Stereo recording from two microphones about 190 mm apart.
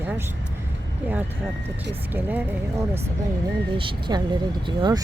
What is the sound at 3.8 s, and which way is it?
Speech, 25° right (ahead or behind).